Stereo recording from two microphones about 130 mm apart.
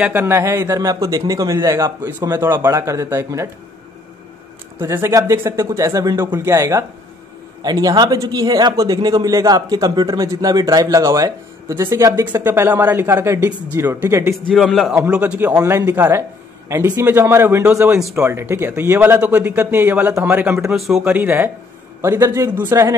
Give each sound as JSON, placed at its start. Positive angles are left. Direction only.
{"t": 0.0, "sound": "speech", "side_deg": -15}
{"t": 4.7, "sound": "speech", "side_deg": -20}
{"t": 14.5, "sound": "a man's voice", "side_deg": 0}
{"t": 15.5, "sound": "speech", "side_deg": -25}
{"t": 17.9, "sound": "a man's voice", "side_deg": -5}
{"t": 18.2, "sound": "speech", "side_deg": -20}
{"t": 20.7, "sound": "a man's voice", "side_deg": 0}
{"t": 21.1, "sound": "speech", "side_deg": -15}